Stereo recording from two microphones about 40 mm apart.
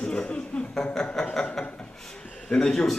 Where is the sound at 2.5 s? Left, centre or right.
Centre.